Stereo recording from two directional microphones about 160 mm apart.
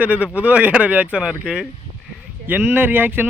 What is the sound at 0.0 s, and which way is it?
Speech, 10° right (ahead or behind).